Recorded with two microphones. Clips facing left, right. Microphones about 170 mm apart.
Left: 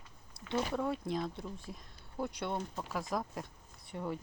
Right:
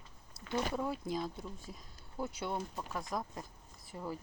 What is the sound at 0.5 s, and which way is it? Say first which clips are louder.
Speech: left 2 dB; centre (ahead or behind).